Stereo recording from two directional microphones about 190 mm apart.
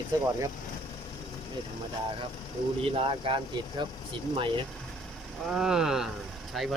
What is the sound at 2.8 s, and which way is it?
Speech, 30° right (ahead or behind).